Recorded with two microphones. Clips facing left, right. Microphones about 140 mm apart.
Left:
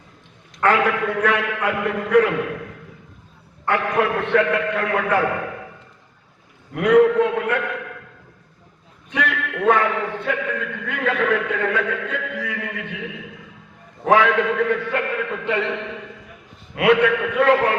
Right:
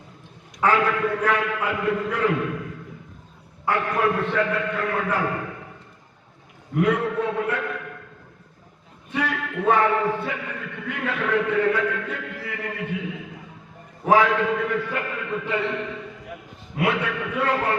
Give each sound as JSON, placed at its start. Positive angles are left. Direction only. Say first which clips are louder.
{"t": 0.6, "sound": "a man's voice", "louder": "left 2 dB", "side_deg": 70}
{"t": 3.7, "sound": "a man's voice", "louder": "left 2 dB", "side_deg": 70}
{"t": 6.7, "sound": "a man's voice", "louder": "left 8 dB", "side_deg": 70}
{"t": 9.0, "sound": "a man's voice", "louder": "left 2 dB", "side_deg": 70}